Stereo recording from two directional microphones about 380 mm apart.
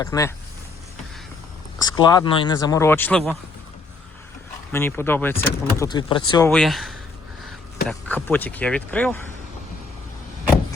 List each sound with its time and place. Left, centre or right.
0.0 s speech: centre
1.8 s speech: centre
4.7 s speech: centre